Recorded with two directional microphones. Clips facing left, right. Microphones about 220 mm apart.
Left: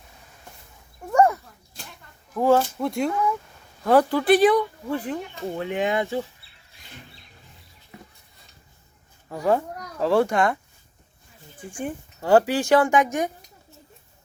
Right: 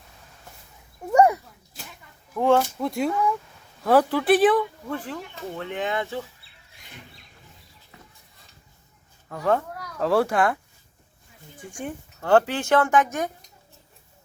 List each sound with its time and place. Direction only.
1.1 s a sound: 15° right (ahead or behind)
2.3 s speech: 5° left (ahead or behind)
5.5 s speech: 15° left (ahead or behind)
7.9 s stir: 15° left (ahead or behind)
9.3 s speech: 15° left (ahead or behind)
10.0 s speech: centre (ahead or behind)
11.8 s speech: 5° left (ahead or behind)